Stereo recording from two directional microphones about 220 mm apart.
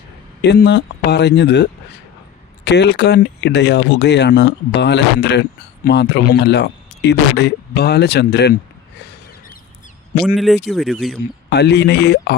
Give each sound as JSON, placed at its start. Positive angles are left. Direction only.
{"t": 0.4, "sound": "speech", "side_deg": 45}
{"t": 2.6, "sound": "speech", "side_deg": 50}
{"t": 10.2, "sound": "speech", "side_deg": 0}
{"t": 11.4, "sound": "speech", "side_deg": 50}